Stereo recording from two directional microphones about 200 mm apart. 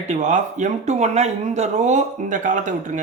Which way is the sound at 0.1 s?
35° right (ahead or behind).